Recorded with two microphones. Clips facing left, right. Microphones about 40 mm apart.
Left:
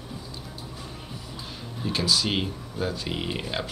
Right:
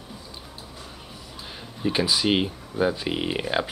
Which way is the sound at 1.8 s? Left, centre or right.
Right.